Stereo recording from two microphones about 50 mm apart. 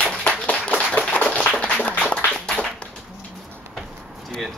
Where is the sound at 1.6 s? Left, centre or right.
Left.